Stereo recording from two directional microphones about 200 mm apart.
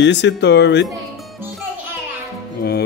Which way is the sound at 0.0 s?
60° left (ahead or behind).